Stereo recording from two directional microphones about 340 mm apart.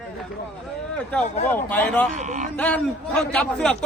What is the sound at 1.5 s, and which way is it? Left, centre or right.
Speech, centre.